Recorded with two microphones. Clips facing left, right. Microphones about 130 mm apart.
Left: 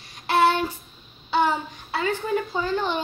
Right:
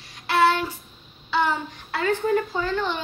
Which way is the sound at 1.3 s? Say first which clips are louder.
Left 1 dB; 15° left (ahead or behind).